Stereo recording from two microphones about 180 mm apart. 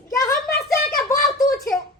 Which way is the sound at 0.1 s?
20° left (ahead or behind).